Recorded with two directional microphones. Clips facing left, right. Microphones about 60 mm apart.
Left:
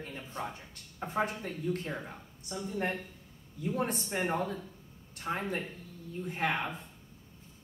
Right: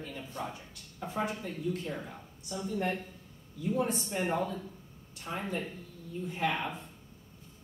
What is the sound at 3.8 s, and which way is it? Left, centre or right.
Speech, left.